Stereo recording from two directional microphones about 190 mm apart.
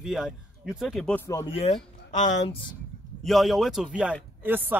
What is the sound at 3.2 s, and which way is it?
Speech, centre (ahead or behind).